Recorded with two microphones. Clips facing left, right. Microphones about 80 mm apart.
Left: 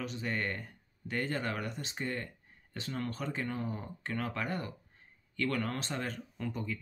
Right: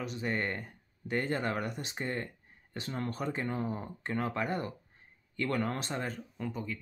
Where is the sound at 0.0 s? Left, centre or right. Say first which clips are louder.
Right 2 dB; right.